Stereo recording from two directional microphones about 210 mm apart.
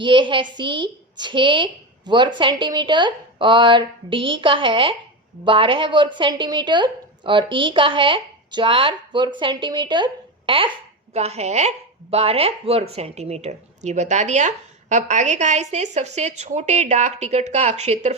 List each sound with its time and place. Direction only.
0.0 s a woman's voice: 25° right (ahead or behind)